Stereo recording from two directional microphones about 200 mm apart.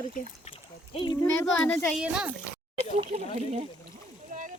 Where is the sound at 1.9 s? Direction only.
5° right (ahead or behind).